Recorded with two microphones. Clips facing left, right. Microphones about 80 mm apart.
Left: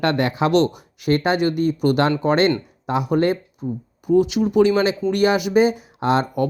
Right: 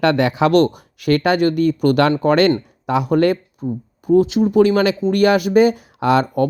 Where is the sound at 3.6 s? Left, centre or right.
Right.